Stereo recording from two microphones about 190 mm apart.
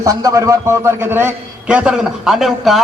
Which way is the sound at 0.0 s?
15° right (ahead or behind).